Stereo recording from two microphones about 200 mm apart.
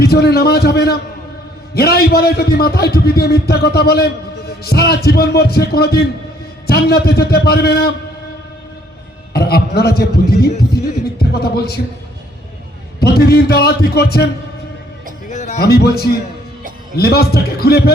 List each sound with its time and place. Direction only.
0.0 s a man's voice: 50° left (ahead or behind)
9.3 s a man's voice: 50° left (ahead or behind)
13.0 s a man's voice: 50° left (ahead or behind)
15.3 s music: 35° left (ahead or behind)
15.5 s a man's voice: 50° left (ahead or behind)